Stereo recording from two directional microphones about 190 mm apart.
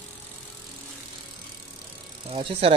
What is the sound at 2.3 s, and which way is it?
Speech, 30° right (ahead or behind).